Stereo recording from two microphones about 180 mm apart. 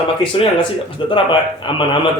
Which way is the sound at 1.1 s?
25° left (ahead or behind).